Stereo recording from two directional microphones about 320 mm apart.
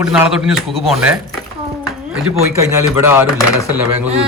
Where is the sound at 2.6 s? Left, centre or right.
Centre.